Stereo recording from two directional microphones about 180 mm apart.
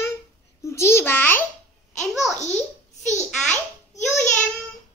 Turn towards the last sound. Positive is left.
turn(degrees=5)  # may be behind; listen again after turning